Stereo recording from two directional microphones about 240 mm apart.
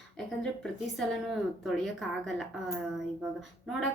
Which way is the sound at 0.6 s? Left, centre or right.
Centre.